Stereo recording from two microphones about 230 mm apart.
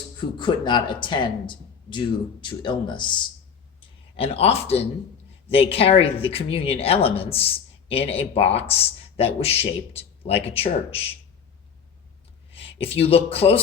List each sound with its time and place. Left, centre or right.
0.3 s speech: centre
12.5 s speech: left